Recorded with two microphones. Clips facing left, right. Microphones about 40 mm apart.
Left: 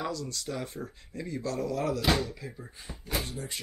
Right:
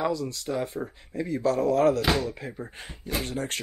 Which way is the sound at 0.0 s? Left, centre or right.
Centre.